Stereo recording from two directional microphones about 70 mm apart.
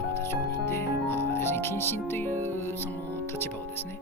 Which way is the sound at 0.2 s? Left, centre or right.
Left.